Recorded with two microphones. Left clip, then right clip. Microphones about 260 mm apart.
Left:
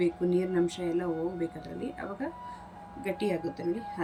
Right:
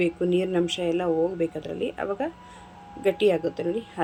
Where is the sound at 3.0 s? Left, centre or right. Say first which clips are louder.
Right 10 dB; right.